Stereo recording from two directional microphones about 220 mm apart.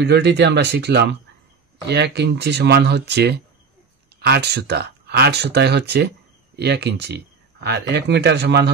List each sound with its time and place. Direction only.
0.0 s speech: 50° right (ahead or behind)